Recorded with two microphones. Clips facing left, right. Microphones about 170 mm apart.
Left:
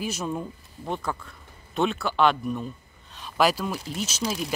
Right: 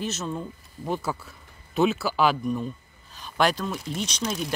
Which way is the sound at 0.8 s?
5° right (ahead or behind).